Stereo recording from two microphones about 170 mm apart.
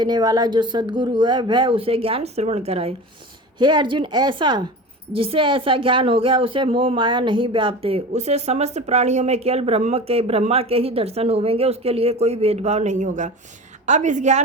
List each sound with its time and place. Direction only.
0.0 s speech: 25° right (ahead or behind)
3.6 s a woman's voice: 25° right (ahead or behind); by 14.4 s 45° right (ahead or behind)